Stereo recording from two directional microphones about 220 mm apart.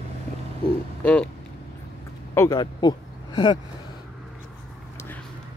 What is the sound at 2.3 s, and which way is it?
Speech, 15° left (ahead or behind).